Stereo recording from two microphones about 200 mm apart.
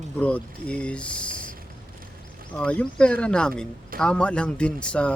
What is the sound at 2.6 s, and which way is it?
Speech, 5° left (ahead or behind).